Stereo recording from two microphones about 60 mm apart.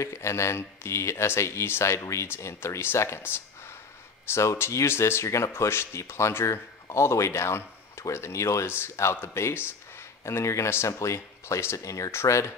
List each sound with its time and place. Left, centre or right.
0.0 s speech: left
12.1 s speech: left